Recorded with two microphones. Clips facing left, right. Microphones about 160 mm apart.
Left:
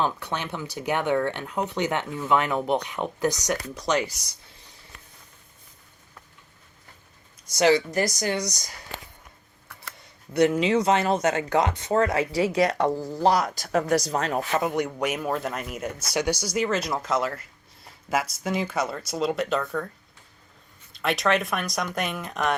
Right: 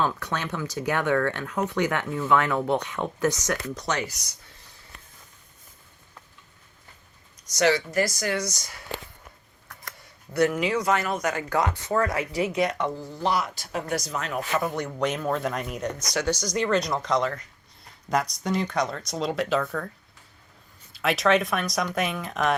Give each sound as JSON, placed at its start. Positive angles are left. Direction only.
{"t": 0.0, "sound": "speech", "side_deg": 25}
{"t": 7.4, "sound": "speech", "side_deg": 15}
{"t": 10.3, "sound": "speech", "side_deg": 25}
{"t": 14.6, "sound": "speech", "side_deg": 15}
{"t": 20.9, "sound": "speech", "side_deg": 0}